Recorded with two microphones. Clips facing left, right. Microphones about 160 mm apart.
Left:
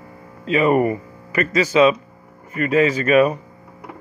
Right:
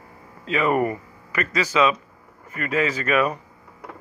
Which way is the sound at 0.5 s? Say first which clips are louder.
Left 5 dB; 20° left (ahead or behind).